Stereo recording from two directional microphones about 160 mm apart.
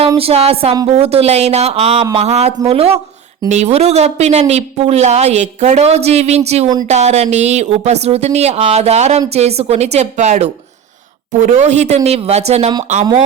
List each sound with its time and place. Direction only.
0.2 s a woman's voice: 40° right (ahead or behind)